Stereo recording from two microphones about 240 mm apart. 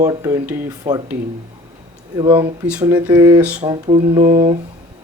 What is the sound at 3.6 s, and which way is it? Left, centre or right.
Speech, right.